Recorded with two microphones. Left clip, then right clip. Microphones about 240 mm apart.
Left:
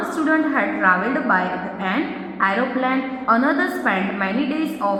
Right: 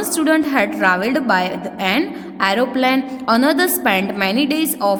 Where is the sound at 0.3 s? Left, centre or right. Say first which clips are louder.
Right 3 dB; right.